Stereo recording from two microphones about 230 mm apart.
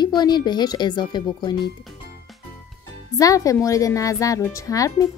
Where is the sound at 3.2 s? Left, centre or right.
Centre.